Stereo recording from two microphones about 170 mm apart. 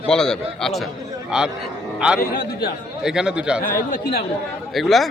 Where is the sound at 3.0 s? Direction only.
5° right (ahead or behind).